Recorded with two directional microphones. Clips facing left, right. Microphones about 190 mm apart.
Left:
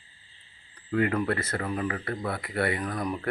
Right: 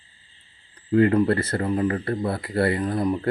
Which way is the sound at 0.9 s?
30° right (ahead or behind).